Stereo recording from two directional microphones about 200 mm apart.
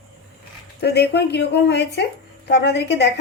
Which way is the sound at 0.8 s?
55° left (ahead or behind).